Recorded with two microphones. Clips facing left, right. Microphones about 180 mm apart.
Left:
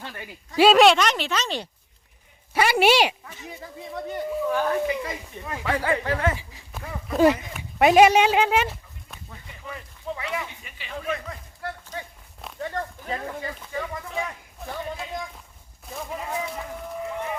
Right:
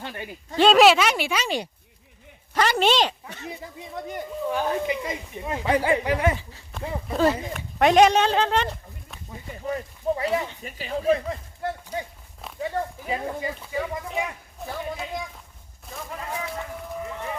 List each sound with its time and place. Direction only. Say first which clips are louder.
0.0 s speech: right 3 dB; 25° right (ahead or behind)
0.5 s speech: even; 5° left (ahead or behind); by 1.6 s 10° right (ahead or behind)
2.5 s a woman's voice: left 2 dB; 10° left (ahead or behind)
3.2 s speech: right 4 dB; 70° right (ahead or behind)
3.9 s speech: left 4 dB; 15° right (ahead or behind)
6.3 s speech: right 2 dB; 10° left (ahead or behind)
9.5 s speech: right 10 dB; 40° right (ahead or behind)
11.6 s a sound: right 5 dB; 20° right (ahead or behind)
12.4 s speech: right 2 dB; 5° right (ahead or behind)
15.9 s a man's voice: left 2 dB; centre (ahead or behind)